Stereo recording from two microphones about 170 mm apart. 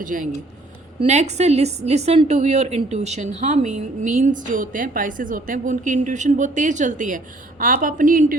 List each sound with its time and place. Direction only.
0.0 s a woman's voice: 50° right (ahead or behind)